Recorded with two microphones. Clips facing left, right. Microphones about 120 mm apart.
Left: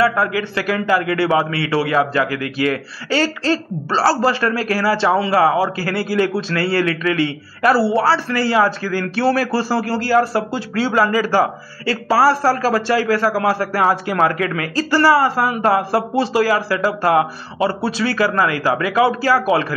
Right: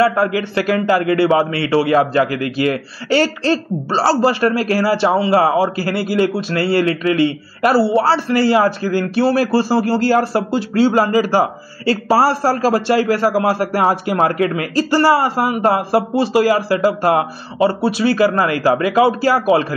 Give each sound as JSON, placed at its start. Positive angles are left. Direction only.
{"t": 0.0, "sound": "a man's voice", "side_deg": -30}
{"t": 17.8, "sound": "speech", "side_deg": -15}
{"t": 18.1, "sound": "a man's voice", "side_deg": -30}